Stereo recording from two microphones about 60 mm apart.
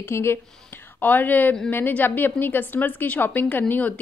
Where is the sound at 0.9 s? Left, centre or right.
Left.